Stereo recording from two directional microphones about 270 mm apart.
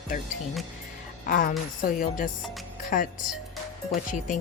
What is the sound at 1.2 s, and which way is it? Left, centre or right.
A woman's voice, left.